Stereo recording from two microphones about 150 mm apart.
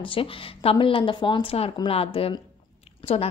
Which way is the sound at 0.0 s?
35° left (ahead or behind).